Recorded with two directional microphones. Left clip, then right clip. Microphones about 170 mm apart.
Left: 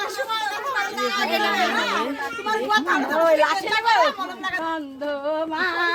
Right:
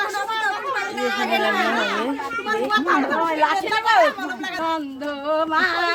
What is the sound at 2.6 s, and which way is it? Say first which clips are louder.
Speech: right 1 dB; 75° left (ahead or behind).